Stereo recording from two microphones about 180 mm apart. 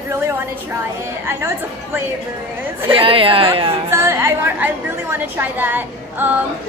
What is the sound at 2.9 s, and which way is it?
Speech, 30° right (ahead or behind).